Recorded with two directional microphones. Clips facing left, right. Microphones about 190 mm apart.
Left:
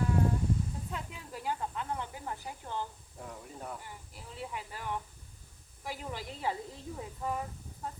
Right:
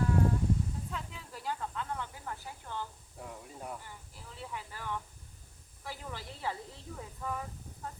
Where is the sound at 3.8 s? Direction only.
15° left (ahead or behind).